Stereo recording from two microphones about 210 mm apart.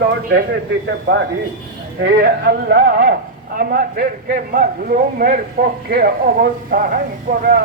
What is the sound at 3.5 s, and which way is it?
Speech, 45° right (ahead or behind).